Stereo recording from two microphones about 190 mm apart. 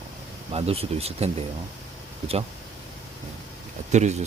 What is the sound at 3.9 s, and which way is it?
Speech, 35° right (ahead or behind).